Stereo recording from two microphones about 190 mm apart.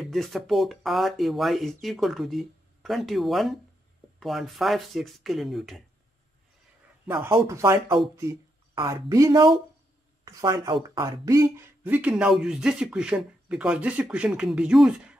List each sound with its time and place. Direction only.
0.0 s speech: centre (ahead or behind)
7.1 s speech: 10° right (ahead or behind)